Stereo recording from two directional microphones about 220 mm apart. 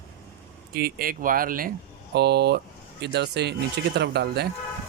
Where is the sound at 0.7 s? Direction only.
45° right (ahead or behind).